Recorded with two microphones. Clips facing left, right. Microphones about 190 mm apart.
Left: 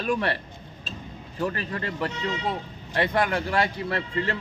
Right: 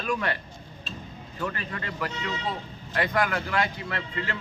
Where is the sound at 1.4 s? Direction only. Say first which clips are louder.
Left 4 dB; 30° left (ahead or behind).